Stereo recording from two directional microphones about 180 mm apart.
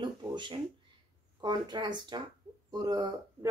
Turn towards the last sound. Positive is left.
turn(degrees=-20)  # may be behind; listen again after turning